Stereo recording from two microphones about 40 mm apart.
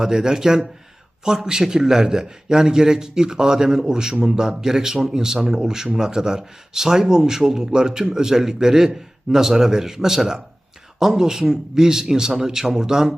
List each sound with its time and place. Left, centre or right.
0.0 s a man's voice: centre